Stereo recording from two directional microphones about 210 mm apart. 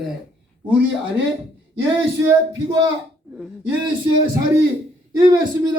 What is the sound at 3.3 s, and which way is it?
Speech, 5° right (ahead or behind).